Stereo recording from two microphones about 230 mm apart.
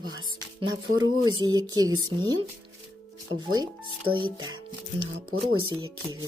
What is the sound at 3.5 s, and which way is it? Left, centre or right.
Speech, centre.